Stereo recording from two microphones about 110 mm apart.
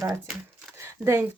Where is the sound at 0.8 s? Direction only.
25° right (ahead or behind).